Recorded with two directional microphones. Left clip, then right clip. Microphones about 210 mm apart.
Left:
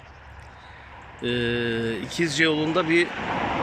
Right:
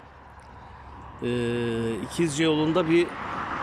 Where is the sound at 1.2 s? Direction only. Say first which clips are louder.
Left 2 dB; 5° right (ahead or behind).